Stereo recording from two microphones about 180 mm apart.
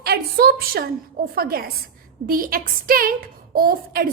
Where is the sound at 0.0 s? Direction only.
60° right (ahead or behind).